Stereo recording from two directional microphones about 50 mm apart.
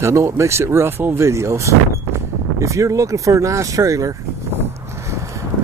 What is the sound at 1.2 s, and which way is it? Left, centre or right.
Speech, right.